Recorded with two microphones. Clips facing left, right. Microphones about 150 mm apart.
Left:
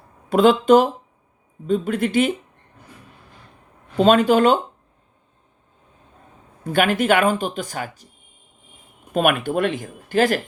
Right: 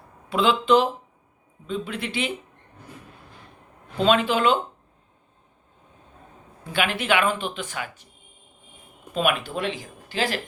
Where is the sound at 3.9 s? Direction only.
45° left (ahead or behind).